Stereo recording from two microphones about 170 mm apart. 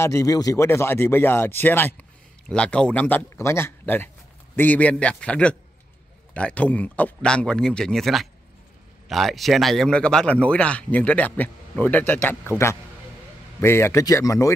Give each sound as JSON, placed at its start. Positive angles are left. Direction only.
{"t": 0.0, "sound": "speech", "side_deg": 20}